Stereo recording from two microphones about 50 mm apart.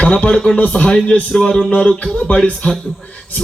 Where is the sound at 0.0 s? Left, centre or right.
Left.